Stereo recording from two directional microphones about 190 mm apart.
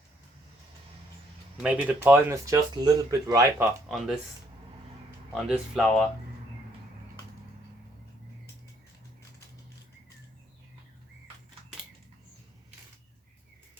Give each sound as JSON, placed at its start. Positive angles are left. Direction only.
{"t": 1.6, "sound": "speech", "side_deg": -5}
{"t": 3.8, "sound": "speech", "side_deg": 0}
{"t": 5.3, "sound": "speech", "side_deg": 0}